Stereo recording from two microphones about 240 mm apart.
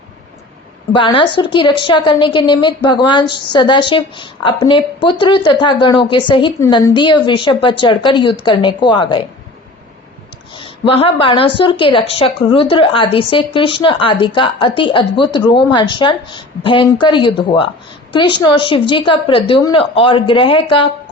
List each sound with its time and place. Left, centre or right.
0.9 s a woman's voice: left
10.6 s a woman's voice: left